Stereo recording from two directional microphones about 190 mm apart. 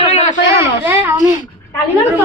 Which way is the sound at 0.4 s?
10° right (ahead or behind).